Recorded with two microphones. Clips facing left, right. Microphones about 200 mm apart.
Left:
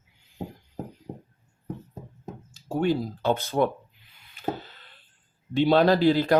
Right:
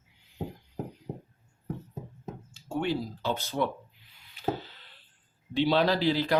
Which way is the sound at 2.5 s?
40° left (ahead or behind).